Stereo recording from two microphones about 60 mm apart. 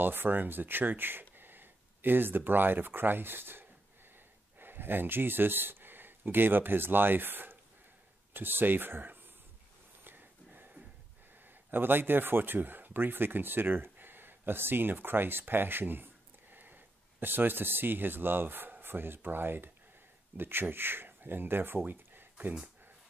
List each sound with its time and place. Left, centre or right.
0.0 s speech: right
10.0 s a sound: right
11.7 s speech: right